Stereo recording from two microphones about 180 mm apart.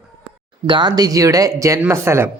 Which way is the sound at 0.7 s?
25° right (ahead or behind).